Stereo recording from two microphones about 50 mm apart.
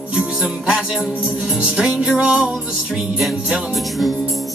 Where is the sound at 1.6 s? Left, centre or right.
Centre.